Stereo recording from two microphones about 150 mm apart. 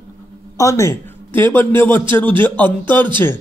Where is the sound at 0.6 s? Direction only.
20° left (ahead or behind).